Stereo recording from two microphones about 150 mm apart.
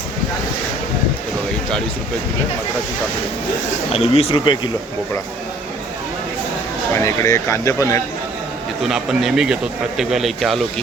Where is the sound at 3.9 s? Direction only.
45° left (ahead or behind).